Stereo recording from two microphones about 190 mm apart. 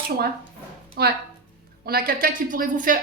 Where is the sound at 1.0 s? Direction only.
55° right (ahead or behind).